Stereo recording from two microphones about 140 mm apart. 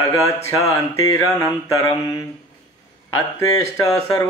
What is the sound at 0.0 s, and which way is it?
Speech, 20° left (ahead or behind).